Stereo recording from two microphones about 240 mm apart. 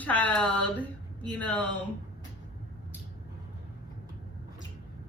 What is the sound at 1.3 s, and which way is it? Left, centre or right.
Speech, centre.